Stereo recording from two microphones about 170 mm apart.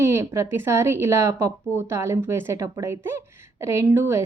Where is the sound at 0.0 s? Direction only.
15° right (ahead or behind).